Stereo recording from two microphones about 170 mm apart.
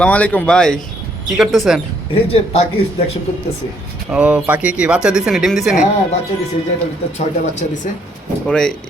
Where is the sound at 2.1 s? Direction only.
35° left (ahead or behind).